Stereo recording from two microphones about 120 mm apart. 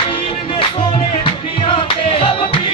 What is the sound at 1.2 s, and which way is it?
Music, 50° left (ahead or behind).